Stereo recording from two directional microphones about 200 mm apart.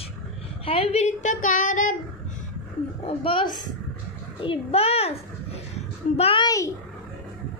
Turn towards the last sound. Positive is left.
turn(degrees=15)  # may be behind; listen again after turning